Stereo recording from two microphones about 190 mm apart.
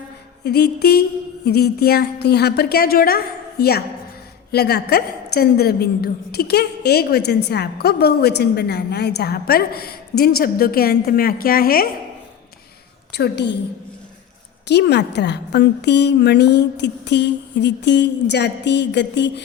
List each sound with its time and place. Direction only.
0.4 s a woman's voice: 55° left (ahead or behind)
13.1 s a woman's voice: 60° left (ahead or behind)
14.7 s a woman's voice: 60° left (ahead or behind)